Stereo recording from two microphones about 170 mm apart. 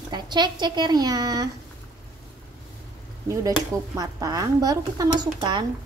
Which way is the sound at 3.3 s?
20° right (ahead or behind).